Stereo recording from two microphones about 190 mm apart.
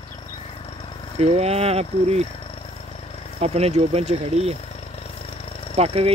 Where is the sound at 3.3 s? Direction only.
35° right (ahead or behind).